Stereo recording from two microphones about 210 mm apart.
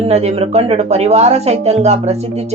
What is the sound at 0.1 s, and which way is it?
Speech, 30° right (ahead or behind).